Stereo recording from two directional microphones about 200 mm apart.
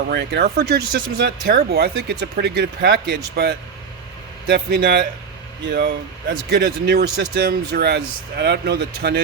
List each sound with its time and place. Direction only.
0.1 s speech: 55° right (ahead or behind)